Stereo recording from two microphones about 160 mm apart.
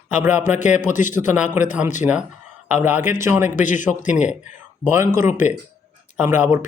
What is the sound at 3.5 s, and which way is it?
Speech, 50° left (ahead or behind).